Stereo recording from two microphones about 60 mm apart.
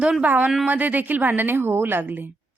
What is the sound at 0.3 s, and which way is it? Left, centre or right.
A woman's voice, right.